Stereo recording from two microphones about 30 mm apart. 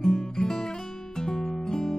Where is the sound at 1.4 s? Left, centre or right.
Centre.